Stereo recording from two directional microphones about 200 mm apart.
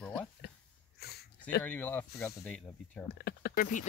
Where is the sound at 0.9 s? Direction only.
55° left (ahead or behind).